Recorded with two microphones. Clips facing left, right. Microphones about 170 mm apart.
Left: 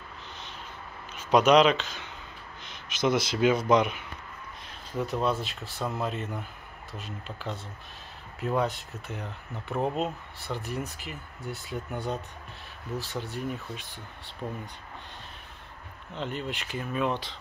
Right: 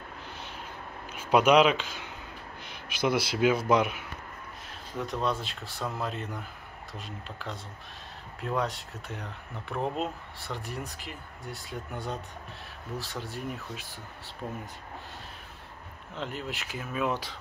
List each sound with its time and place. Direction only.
1.1 s speech: 10° right (ahead or behind)
16.2 s speech: centre (ahead or behind)